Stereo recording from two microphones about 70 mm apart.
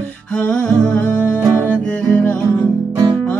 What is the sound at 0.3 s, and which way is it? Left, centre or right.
Music, centre.